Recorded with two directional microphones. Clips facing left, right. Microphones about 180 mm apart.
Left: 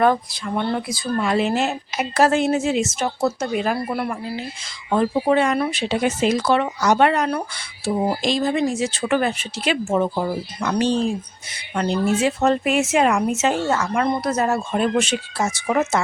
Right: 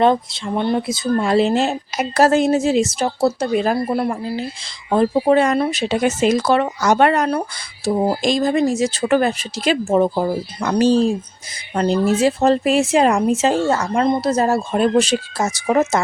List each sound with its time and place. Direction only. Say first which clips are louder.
0.0 s speech: right 3 dB; 25° right (ahead or behind)